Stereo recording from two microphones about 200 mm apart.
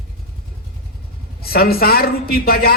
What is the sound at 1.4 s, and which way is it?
A man's voice, 50° left (ahead or behind).